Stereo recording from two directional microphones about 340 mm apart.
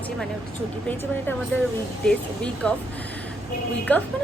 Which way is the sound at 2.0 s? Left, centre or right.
Centre.